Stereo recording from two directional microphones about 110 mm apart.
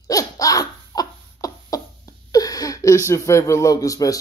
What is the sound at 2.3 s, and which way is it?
Speech, 35° left (ahead or behind).